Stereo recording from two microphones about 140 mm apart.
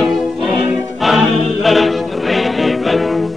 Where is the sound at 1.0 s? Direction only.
Centre (ahead or behind).